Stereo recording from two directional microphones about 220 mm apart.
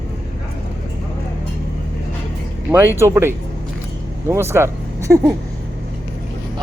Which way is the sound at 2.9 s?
10° right (ahead or behind).